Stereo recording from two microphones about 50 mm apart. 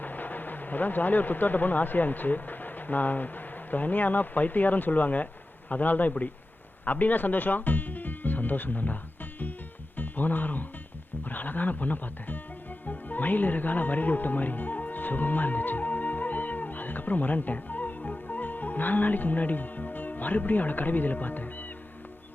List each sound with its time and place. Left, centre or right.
0.0 s speech: left
10.0 s speech: left
12.8 s music: left